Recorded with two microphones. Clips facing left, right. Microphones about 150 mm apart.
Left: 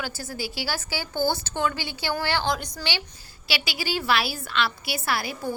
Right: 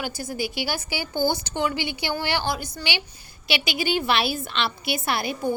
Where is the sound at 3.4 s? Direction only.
20° right (ahead or behind).